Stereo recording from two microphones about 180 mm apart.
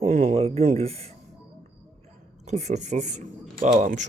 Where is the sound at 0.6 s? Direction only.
35° right (ahead or behind).